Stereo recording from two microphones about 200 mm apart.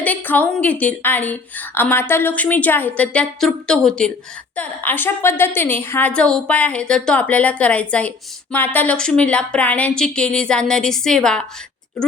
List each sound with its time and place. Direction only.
0.0 s a woman's voice: 10° left (ahead or behind)